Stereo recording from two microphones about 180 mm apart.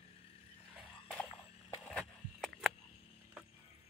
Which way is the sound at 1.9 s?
Centre (ahead or behind).